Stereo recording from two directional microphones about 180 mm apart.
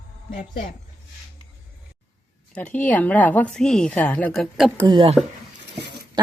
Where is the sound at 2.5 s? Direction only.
10° left (ahead or behind).